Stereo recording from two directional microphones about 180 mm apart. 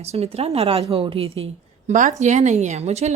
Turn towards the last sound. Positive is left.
turn(degrees=-35)  # may be behind; listen again after turning